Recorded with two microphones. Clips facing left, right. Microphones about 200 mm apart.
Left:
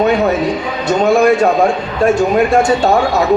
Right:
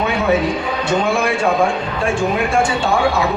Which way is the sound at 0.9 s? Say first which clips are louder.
Left 8 dB; 40° left (ahead or behind).